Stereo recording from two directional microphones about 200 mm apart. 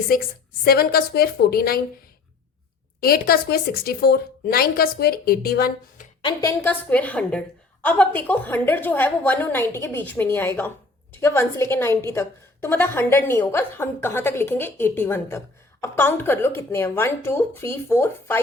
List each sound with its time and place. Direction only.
0.1 s speech: 45° left (ahead or behind)
3.0 s speech: 50° left (ahead or behind)
6.2 s a woman's voice: 15° left (ahead or behind)